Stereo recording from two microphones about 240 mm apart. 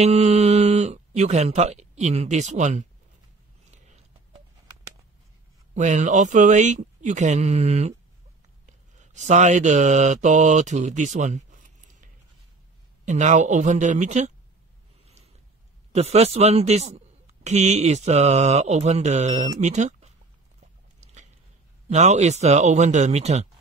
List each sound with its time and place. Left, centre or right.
0.0 s speech: right
3.7 s a sound: right
5.8 s a man's voice: right
9.0 s speech: right
15.9 s a man's voice: right
21.0 s biting: right
21.8 s a man's voice: right